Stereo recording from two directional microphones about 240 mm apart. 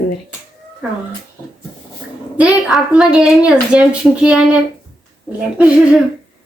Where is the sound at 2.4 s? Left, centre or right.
Centre.